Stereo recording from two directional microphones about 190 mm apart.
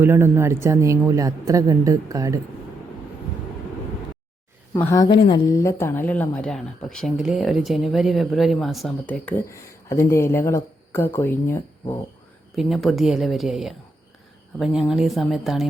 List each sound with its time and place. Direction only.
0.0 s speech: 10° right (ahead or behind)
4.7 s speech: 15° left (ahead or behind)
12.5 s a woman's voice: centre (ahead or behind)